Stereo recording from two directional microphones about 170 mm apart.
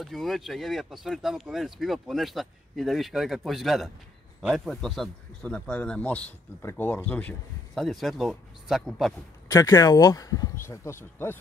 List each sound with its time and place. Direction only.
0.0 s speech: centre (ahead or behind)
9.5 s speech: 20° left (ahead or behind)